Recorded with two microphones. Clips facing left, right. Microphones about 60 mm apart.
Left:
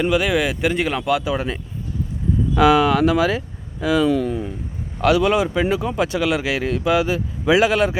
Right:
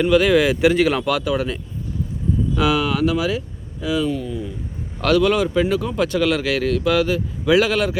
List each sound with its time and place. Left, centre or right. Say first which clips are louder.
0.0 s speech: right 3 dB; centre
1.3 s speech: right 1 dB; left
2.6 s speech: left 6 dB; left
4.3 s speech: left 3 dB; left
4.9 s a man's voice: even; centre